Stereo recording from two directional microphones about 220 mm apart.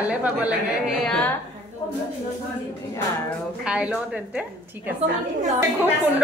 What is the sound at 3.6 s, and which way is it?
Speech, 5° right (ahead or behind).